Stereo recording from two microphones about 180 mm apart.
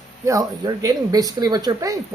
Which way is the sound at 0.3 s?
20° right (ahead or behind).